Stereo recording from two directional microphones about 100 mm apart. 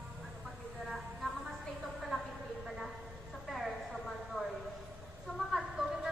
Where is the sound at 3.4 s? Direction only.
Centre (ahead or behind).